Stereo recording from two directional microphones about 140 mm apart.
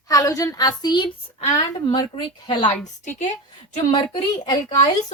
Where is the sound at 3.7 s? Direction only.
45° left (ahead or behind).